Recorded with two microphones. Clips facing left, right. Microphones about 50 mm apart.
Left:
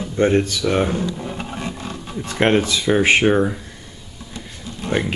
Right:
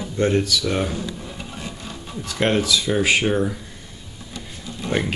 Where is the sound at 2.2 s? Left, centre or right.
Left.